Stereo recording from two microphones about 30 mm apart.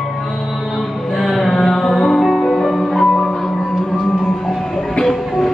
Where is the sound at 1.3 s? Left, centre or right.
Centre.